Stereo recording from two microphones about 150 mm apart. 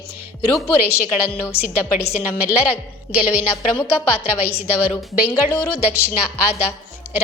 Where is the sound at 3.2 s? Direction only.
15° left (ahead or behind).